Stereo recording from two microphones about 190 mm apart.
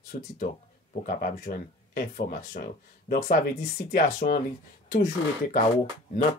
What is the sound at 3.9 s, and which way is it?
Speech, 45° left (ahead or behind).